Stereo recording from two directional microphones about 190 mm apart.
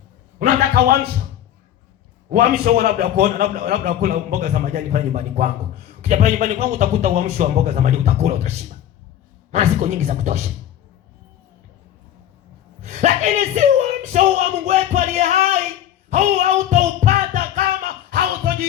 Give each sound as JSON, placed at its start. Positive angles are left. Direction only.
{"t": 0.3, "sound": "a sound", "side_deg": -50}
{"t": 2.3, "sound": "a man's voice", "side_deg": -55}
{"t": 4.4, "sound": "speech", "side_deg": -40}
{"t": 12.8, "sound": "speech", "side_deg": -35}
{"t": 16.0, "sound": "music", "side_deg": -40}